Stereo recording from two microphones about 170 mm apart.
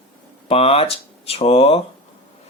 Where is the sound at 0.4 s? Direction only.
35° left (ahead or behind).